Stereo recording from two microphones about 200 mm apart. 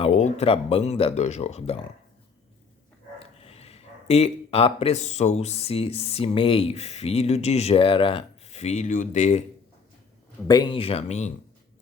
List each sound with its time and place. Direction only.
0.0 s speech: 35° left (ahead or behind)
3.2 s speech: 30° left (ahead or behind)
10.4 s speech: 20° left (ahead or behind)